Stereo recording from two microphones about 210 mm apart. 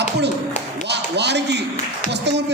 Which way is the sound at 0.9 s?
55° right (ahead or behind).